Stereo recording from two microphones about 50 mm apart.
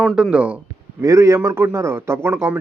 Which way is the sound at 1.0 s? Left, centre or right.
Right.